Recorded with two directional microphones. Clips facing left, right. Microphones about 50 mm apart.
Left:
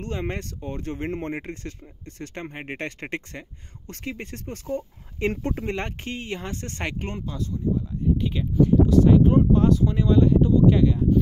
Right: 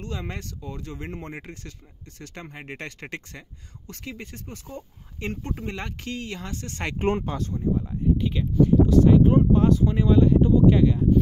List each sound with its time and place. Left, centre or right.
0.0 s speech: left
5.5 s speech: left
6.0 s speech: left
7.1 s speech: right
8.2 s speech: centre